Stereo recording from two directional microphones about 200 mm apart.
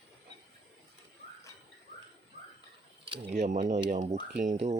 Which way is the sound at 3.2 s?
35° right (ahead or behind).